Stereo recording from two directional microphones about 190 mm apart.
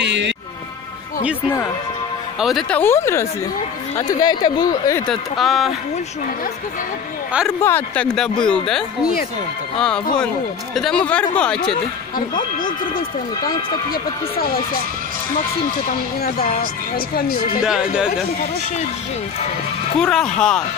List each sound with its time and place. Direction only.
0.0 s music: 65° right (ahead or behind)
2.4 s speech: centre (ahead or behind)
2.8 s speech: 15° left (ahead or behind)
5.0 s speech: centre (ahead or behind)
7.6 s speech: 10° left (ahead or behind)
17.6 s speech: 5° right (ahead or behind)
20.0 s speech: 5° left (ahead or behind)